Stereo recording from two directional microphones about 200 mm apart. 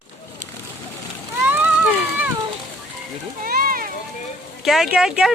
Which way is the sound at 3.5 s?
45° right (ahead or behind).